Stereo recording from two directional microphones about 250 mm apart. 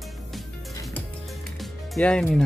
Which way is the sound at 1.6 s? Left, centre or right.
Centre.